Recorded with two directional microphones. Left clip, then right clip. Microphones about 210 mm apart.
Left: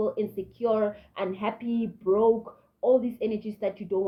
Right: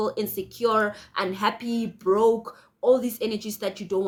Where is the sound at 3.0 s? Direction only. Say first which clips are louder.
Right 2 dB; 35° right (ahead or behind).